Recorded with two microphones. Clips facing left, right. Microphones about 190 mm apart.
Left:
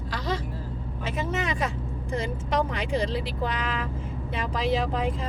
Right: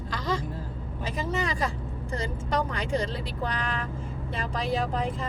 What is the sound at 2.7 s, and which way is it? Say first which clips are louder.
Speech: left 1 dB; centre (ahead or behind).